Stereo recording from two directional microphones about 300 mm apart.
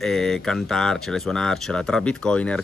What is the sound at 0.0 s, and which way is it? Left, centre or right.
Speech, centre.